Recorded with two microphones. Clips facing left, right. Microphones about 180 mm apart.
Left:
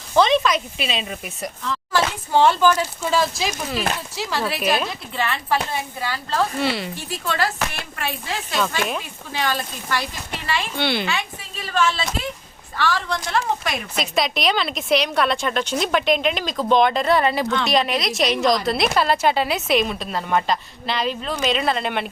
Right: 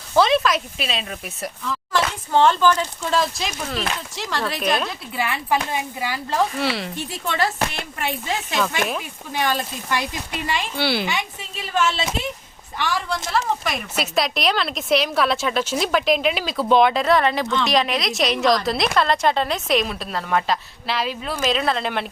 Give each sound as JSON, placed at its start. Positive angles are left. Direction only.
{"t": 0.1, "sound": "speech", "side_deg": -5}
{"t": 2.3, "sound": "speech", "side_deg": 10}
{"t": 5.1, "sound": "speech", "side_deg": -10}
{"t": 6.6, "sound": "speech", "side_deg": 0}
{"t": 6.9, "sound": "speech", "side_deg": -20}
{"t": 10.8, "sound": "speech", "side_deg": -5}
{"t": 12.7, "sound": "speech", "side_deg": -15}